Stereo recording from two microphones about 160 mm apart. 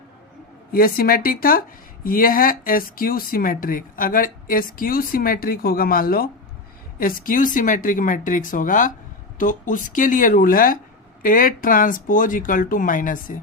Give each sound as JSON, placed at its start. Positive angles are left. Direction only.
{"t": 0.7, "sound": "speech", "side_deg": 65}